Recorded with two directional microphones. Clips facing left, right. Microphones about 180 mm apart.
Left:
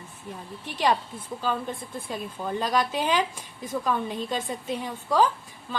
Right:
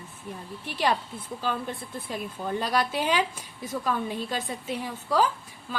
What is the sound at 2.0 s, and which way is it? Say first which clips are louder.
A woman's voice: even; 5° right (ahead or behind).